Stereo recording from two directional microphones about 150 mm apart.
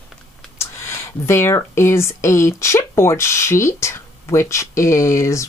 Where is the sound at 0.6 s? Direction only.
20° left (ahead or behind).